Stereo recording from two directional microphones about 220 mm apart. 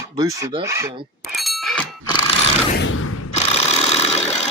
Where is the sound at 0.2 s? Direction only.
15° right (ahead or behind).